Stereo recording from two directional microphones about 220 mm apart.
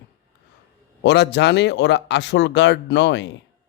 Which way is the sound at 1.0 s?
50° left (ahead or behind).